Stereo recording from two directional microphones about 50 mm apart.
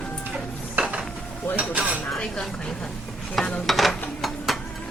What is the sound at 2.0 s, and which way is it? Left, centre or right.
Speech, centre.